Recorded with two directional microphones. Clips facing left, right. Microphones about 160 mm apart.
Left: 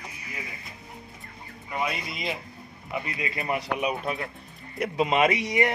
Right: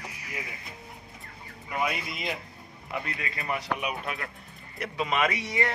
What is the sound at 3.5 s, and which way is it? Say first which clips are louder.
Speech: left 3 dB; 35° left (ahead or behind).